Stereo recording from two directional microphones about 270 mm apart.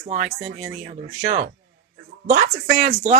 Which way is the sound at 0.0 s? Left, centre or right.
Right.